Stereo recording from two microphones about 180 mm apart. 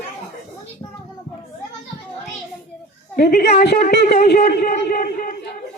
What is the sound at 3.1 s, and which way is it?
A woman's voice, 60° left (ahead or behind).